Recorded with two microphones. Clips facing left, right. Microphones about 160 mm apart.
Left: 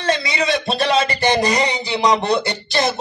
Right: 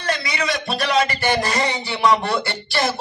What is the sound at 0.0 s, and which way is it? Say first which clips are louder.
Speech: left 4 dB; 25° left (ahead or behind).